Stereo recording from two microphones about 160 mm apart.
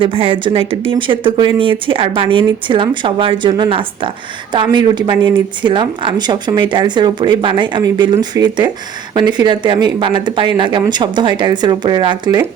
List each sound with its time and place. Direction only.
0.0 s speech: 35° right (ahead or behind)